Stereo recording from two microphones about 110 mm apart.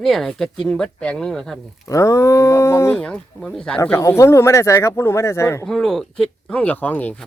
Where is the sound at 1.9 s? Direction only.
30° left (ahead or behind).